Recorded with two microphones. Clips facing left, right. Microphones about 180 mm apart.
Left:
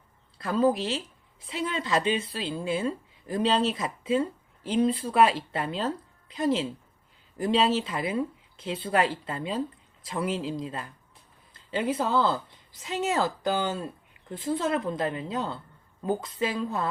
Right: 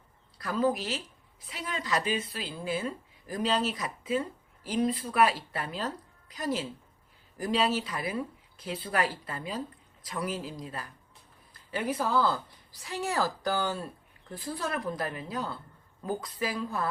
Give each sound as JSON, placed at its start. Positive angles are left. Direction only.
{"t": 0.3, "sound": "a woman's voice", "side_deg": 25}